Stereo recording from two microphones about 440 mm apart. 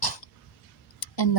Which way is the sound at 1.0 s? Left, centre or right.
Left.